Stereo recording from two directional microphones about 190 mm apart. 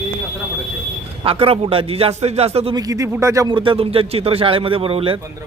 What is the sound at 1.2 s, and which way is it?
Speech, 30° right (ahead or behind).